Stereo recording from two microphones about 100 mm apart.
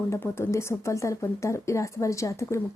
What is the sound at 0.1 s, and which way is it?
Speech, 25° left (ahead or behind).